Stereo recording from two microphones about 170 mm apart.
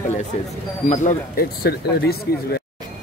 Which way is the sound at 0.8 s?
45° left (ahead or behind).